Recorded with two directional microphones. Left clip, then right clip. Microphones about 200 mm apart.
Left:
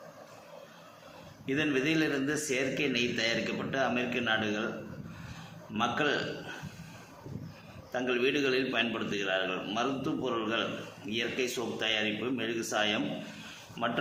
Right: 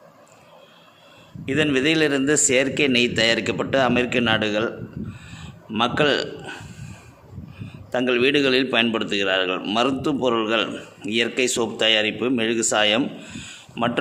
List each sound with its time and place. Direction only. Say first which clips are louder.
1.5 s a man's voice: right 10 dB; 55° right (ahead or behind)
5.7 s a man's voice: right 10 dB; 55° right (ahead or behind)
7.9 s a man's voice: right 10 dB; 55° right (ahead or behind)